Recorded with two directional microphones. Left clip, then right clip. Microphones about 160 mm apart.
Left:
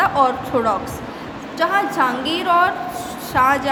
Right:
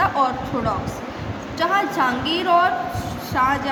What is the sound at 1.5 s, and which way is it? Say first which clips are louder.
A woman's voice: left 2 dB; 20° left (ahead or behind).